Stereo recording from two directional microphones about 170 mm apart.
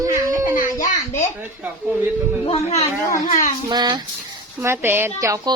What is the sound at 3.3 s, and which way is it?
Speech, 45° left (ahead or behind).